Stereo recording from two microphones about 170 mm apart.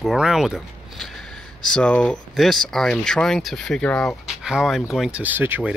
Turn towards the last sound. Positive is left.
turn(degrees=-10)  # may be behind; listen again after turning